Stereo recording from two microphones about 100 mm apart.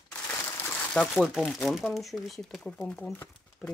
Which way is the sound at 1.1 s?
Centre (ahead or behind).